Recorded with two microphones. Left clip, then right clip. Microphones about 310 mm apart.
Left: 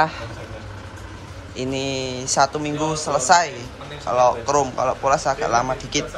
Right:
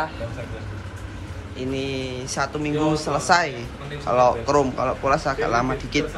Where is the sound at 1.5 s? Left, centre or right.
Centre.